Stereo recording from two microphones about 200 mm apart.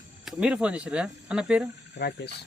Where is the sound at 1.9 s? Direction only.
55° left (ahead or behind).